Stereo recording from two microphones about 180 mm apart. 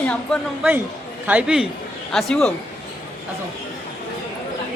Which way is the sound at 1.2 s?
5° right (ahead or behind).